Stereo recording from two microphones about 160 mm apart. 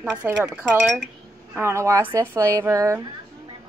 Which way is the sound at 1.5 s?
15° right (ahead or behind).